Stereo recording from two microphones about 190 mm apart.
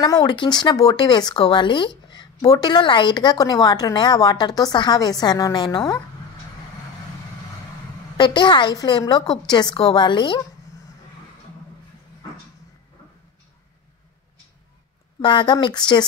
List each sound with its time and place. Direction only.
0.0 s speech: 20° left (ahead or behind)
8.2 s speech: 25° left (ahead or behind)
15.1 s speech: 25° left (ahead or behind)